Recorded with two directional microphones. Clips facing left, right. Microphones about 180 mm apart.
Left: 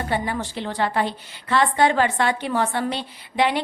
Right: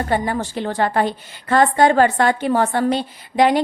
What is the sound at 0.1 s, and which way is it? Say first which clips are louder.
A woman's voice: right 5 dB; 45° right (ahead or behind).